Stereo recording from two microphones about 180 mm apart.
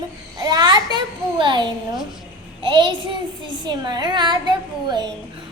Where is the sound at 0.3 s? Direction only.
20° right (ahead or behind).